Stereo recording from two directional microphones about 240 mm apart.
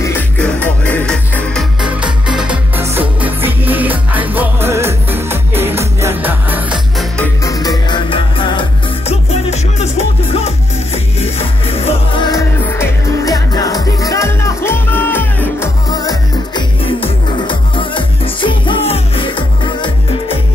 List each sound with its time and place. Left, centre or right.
0.0 s music: centre
7.4 s music: centre